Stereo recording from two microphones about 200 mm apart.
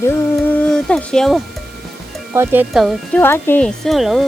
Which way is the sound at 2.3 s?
10° right (ahead or behind).